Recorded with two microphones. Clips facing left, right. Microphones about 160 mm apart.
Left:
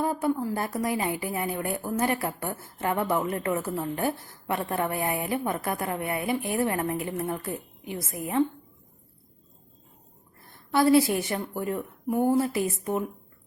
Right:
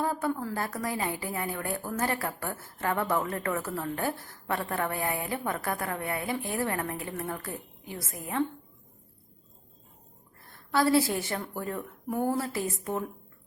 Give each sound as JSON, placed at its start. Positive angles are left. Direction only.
{"t": 0.0, "sound": "a woman's voice", "side_deg": 15}
{"t": 10.7, "sound": "a woman's voice", "side_deg": 20}